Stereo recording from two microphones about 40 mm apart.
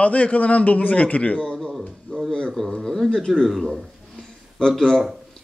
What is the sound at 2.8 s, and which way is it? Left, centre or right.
Speech, centre.